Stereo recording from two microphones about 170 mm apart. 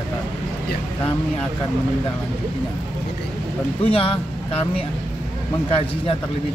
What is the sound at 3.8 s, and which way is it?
Speech, 30° left (ahead or behind).